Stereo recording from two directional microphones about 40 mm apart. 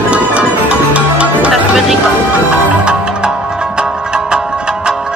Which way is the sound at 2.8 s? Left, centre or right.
Right.